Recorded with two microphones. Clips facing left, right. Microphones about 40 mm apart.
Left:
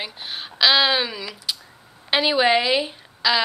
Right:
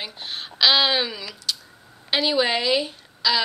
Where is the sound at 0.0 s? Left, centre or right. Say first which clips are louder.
Left 1 dB; centre.